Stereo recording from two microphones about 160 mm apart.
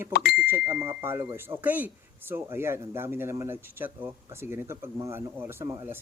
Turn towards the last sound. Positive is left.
turn(degrees=-15)  # may be behind; listen again after turning